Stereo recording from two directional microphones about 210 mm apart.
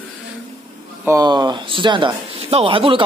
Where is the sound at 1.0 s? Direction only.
15° right (ahead or behind).